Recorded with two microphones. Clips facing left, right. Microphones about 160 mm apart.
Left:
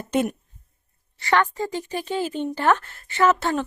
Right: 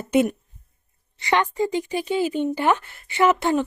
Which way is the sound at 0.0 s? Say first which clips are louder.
Right 4 dB; 10° right (ahead or behind).